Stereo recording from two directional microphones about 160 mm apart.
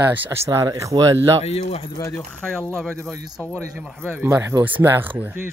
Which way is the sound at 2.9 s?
15° right (ahead or behind).